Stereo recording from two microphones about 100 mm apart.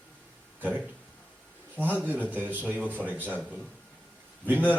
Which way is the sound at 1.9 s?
20° right (ahead or behind).